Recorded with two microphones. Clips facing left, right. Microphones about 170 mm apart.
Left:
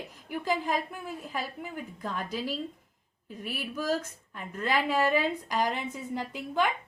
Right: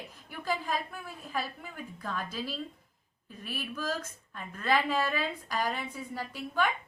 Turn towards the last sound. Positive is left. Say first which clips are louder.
# left 3 dB
turn(degrees=15)  # may be behind; listen again after turning